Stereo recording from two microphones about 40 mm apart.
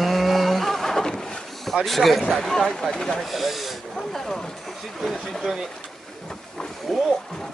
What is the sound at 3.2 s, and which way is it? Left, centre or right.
Speech, centre.